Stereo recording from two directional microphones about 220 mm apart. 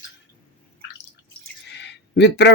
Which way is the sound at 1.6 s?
50° left (ahead or behind).